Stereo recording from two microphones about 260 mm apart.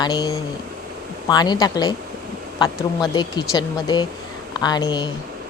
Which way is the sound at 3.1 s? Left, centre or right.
Centre.